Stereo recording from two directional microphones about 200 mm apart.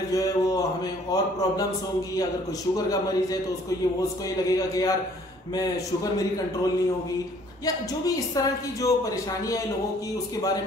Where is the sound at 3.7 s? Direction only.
15° left (ahead or behind).